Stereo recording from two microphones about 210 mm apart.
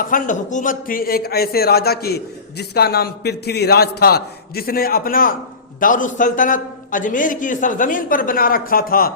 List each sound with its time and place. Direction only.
0.0 s a man's voice: 40° left (ahead or behind)